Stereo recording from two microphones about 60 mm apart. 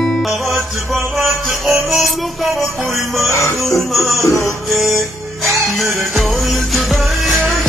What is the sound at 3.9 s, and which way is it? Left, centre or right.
Music, centre.